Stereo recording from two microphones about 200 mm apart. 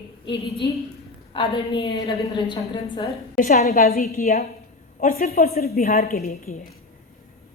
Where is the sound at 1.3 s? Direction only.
25° left (ahead or behind).